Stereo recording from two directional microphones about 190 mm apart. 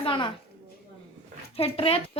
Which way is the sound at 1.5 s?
30° left (ahead or behind).